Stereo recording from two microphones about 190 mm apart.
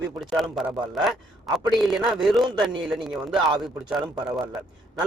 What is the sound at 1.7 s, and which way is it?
Speech, centre (ahead or behind).